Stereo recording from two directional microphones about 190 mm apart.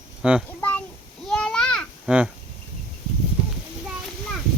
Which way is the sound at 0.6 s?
10° left (ahead or behind).